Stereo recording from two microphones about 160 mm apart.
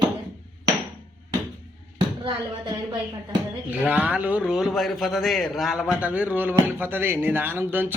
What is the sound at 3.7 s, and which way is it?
A man's voice, 10° right (ahead or behind).